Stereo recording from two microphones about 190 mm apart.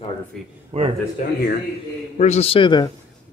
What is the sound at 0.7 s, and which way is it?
Speech, 35° right (ahead or behind).